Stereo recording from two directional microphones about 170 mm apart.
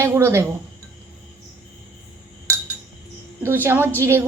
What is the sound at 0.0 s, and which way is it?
Speech, 15° right (ahead or behind).